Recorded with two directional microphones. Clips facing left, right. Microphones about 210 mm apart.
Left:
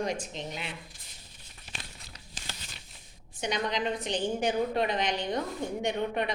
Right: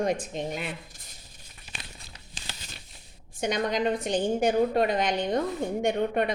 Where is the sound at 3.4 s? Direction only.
50° right (ahead or behind).